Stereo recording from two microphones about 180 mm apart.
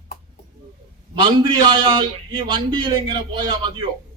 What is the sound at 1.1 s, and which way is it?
A man's voice, 25° right (ahead or behind).